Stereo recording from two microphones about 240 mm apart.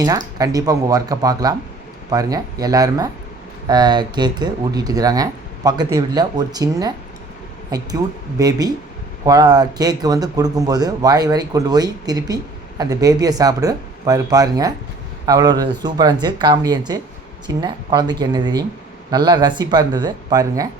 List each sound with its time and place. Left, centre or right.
0.0 s speech: centre